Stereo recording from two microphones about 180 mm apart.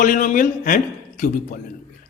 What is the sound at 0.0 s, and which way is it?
A man's voice, 45° left (ahead or behind).